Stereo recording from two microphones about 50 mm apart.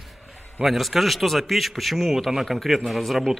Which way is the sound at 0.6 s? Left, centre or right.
Centre.